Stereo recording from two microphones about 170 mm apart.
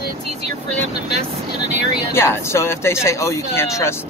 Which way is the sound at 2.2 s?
15° left (ahead or behind).